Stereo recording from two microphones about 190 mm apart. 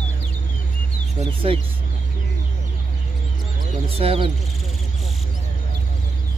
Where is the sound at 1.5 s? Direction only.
30° right (ahead or behind).